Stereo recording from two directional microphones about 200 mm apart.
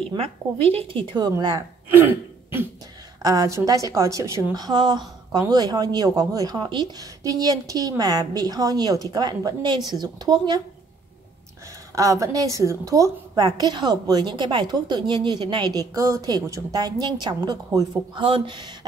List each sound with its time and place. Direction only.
0.1 s a woman's voice: 30° right (ahead or behind)
11.9 s a woman's voice: 15° right (ahead or behind)